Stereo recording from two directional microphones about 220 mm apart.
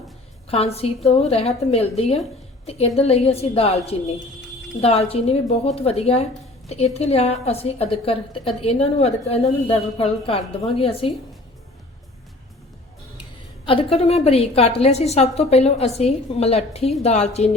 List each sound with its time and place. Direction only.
0.4 s a woman's voice: 25° left (ahead or behind)
13.7 s a woman's voice: 25° left (ahead or behind)